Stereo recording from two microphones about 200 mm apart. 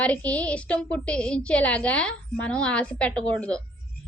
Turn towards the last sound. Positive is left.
turn(degrees=5)  # may be behind; listen again after turning